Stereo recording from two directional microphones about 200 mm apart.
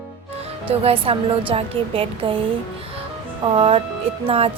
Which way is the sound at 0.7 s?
30° right (ahead or behind).